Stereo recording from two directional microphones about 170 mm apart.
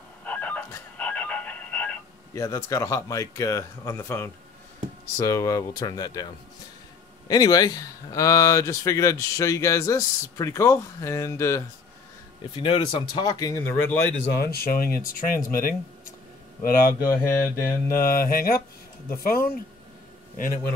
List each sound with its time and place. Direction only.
0.2 s a sound: 10° left (ahead or behind)
0.9 s telephone: 5° left (ahead or behind)
5.1 s speech: 20° left (ahead or behind)
7.2 s speech: 20° left (ahead or behind)
12.5 s speech: 30° left (ahead or behind); by 14.1 s 10° left (ahead or behind)
14.2 s speech: 70° left (ahead or behind); by 15.7 s 55° left (ahead or behind)
17.3 s speech: 55° left (ahead or behind)